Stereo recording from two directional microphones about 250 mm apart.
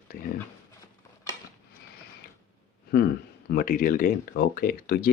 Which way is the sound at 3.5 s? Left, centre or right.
Left.